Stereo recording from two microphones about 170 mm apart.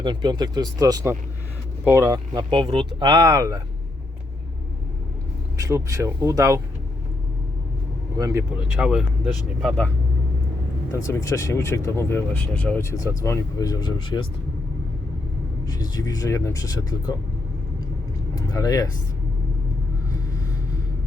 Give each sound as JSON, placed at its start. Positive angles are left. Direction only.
{"t": 0.0, "sound": "speech", "side_deg": -25}
{"t": 5.5, "sound": "speech", "side_deg": -20}
{"t": 8.2, "sound": "speech", "side_deg": -15}
{"t": 8.6, "sound": "speech", "side_deg": -5}
{"t": 10.9, "sound": "speech", "side_deg": 15}
{"t": 16.0, "sound": "speech", "side_deg": 20}
{"t": 18.4, "sound": "speech", "side_deg": 20}